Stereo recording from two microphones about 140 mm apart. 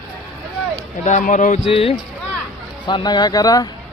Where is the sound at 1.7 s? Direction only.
40° left (ahead or behind).